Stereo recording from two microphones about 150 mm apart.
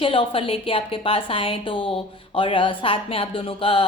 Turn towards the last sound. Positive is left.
turn(degrees=35)  # may be behind; listen again after turning